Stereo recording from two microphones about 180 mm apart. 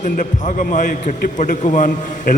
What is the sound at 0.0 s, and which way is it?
A man's voice, 45° left (ahead or behind).